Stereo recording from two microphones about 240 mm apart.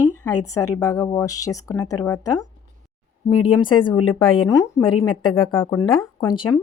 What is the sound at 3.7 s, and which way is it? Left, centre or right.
Speech, centre.